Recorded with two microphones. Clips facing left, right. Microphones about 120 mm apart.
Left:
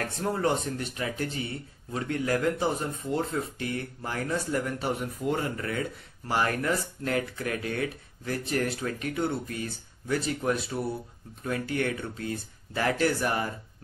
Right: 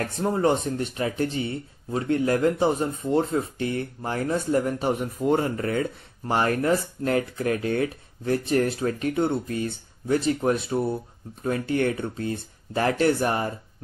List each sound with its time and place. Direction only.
0.2 s speech: 25° right (ahead or behind)